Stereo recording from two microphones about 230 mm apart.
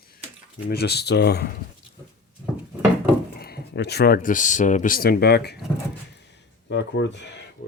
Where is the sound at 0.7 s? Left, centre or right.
Left.